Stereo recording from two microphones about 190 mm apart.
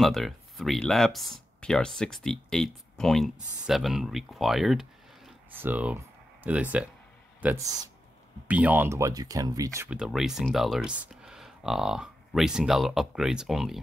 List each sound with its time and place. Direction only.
0.0 s speech: centre (ahead or behind); by 7.9 s 20° right (ahead or behind)
8.5 s speech: 10° right (ahead or behind)
9.8 s speech: 5° right (ahead or behind)